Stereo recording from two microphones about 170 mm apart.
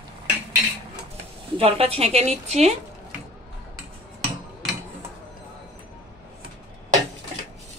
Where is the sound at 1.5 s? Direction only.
35° right (ahead or behind).